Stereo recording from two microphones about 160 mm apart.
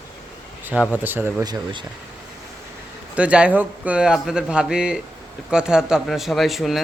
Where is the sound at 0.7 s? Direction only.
10° right (ahead or behind).